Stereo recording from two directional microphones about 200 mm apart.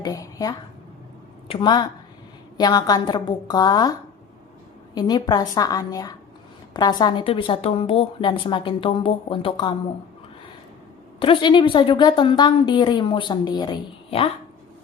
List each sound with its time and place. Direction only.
0.0 s a woman's voice: 20° left (ahead or behind)
4.9 s a woman's voice: 20° left (ahead or behind)
11.2 s a woman's voice: 25° left (ahead or behind)